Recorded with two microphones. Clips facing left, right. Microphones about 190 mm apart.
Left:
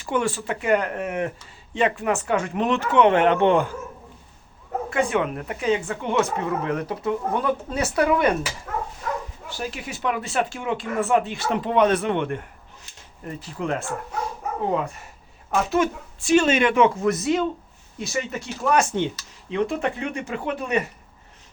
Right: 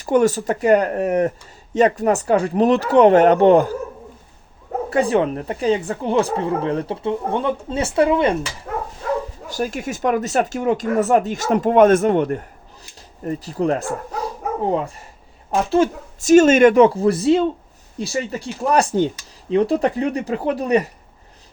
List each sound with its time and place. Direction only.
0.0 s speech: 40° right (ahead or behind)
4.9 s speech: 35° right (ahead or behind)
9.5 s speech: 45° right (ahead or behind)
15.4 s speech: 30° right (ahead or behind)
16.3 s speech: 45° right (ahead or behind)